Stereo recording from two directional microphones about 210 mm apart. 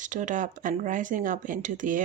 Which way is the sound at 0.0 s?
35° right (ahead or behind).